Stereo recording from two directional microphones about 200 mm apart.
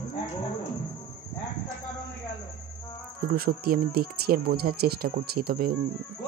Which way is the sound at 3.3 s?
50° right (ahead or behind).